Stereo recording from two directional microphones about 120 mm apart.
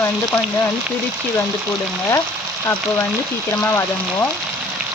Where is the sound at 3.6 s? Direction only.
20° left (ahead or behind).